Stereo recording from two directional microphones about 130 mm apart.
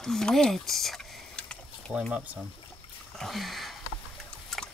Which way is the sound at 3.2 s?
Centre (ahead or behind).